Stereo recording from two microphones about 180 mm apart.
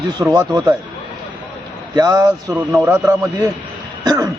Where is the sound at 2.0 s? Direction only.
20° right (ahead or behind).